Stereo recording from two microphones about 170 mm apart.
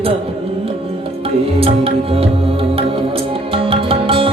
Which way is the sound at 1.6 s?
35° right (ahead or behind).